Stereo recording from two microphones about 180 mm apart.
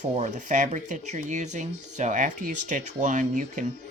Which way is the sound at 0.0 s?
40° right (ahead or behind).